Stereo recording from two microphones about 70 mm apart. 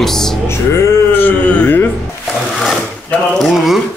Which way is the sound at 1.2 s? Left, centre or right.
Left.